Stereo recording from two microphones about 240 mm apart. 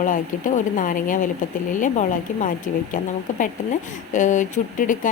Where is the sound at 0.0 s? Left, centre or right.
Left.